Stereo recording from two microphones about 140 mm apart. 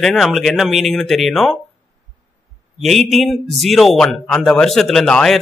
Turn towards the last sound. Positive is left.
turn(degrees=5)  # may be behind; listen again after turning